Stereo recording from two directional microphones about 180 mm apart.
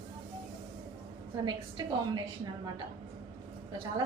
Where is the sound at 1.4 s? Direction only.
25° right (ahead or behind).